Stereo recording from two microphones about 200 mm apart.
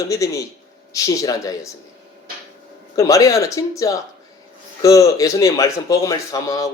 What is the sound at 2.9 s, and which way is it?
A man's voice, 15° left (ahead or behind).